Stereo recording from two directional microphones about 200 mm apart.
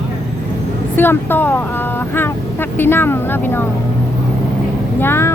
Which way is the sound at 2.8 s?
10° left (ahead or behind).